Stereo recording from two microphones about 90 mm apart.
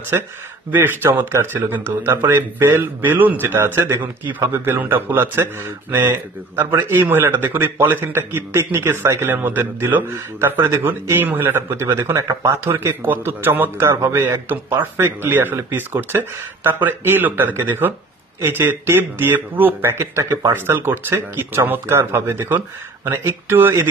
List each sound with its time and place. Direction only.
0.1 s a man's voice: 30° right (ahead or behind)